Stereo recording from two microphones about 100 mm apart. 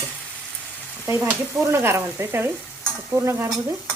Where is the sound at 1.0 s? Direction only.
25° right (ahead or behind).